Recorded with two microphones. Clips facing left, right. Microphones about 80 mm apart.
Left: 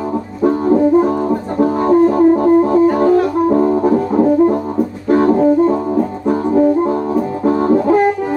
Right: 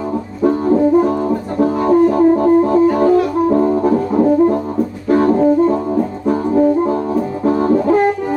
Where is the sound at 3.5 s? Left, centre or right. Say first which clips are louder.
Left 1 dB; centre.